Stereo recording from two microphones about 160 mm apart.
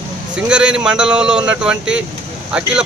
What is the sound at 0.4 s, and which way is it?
Speech, 5° right (ahead or behind).